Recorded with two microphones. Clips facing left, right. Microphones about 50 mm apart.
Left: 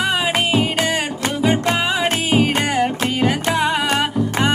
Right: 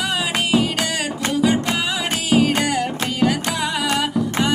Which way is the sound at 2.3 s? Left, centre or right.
Left.